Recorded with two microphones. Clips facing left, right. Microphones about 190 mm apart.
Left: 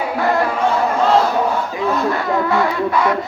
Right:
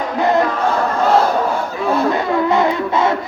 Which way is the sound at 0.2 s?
20° right (ahead or behind).